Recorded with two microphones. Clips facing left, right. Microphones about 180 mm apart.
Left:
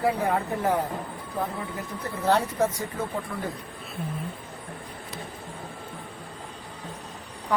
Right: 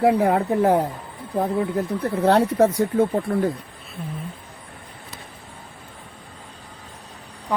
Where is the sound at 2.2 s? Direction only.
65° right (ahead or behind).